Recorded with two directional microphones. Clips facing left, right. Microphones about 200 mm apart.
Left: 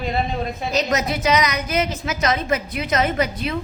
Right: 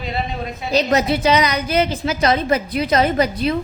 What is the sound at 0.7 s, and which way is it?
A woman's voice, 30° right (ahead or behind).